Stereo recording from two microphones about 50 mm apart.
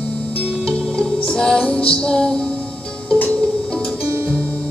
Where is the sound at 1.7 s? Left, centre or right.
Left.